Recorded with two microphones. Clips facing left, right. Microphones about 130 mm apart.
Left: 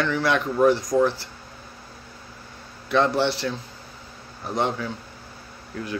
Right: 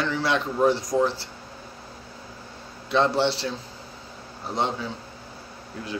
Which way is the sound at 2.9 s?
25° right (ahead or behind).